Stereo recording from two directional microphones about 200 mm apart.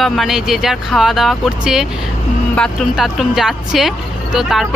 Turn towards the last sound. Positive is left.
turn(degrees=0)  # may be behind; listen again after turning